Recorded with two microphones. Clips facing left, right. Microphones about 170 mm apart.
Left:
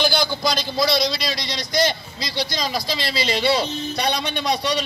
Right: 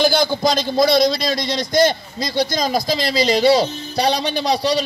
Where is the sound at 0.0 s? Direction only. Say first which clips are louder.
Right 5 dB; 45° right (ahead or behind).